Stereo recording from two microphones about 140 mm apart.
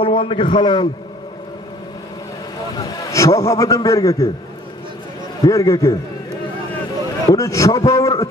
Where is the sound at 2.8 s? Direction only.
25° left (ahead or behind).